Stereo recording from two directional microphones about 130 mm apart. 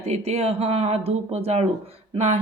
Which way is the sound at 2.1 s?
55° right (ahead or behind).